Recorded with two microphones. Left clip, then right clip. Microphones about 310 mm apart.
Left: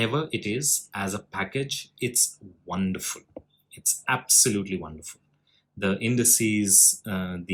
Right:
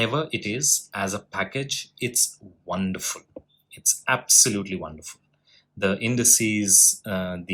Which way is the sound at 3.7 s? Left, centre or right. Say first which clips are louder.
Right 3 dB; right.